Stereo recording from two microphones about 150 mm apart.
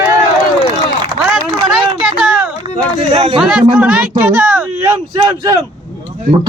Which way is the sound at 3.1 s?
30° right (ahead or behind).